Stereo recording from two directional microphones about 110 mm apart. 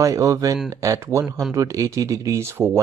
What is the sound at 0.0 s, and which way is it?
Speech, 30° right (ahead or behind).